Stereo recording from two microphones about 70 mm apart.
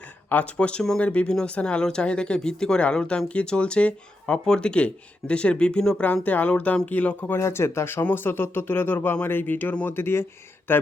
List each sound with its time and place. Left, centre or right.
0.3 s speech: left
6.2 s speech: left
7.3 s speech: left